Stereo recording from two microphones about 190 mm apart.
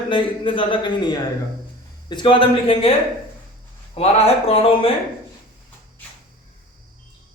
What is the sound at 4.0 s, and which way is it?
Speech, 35° left (ahead or behind).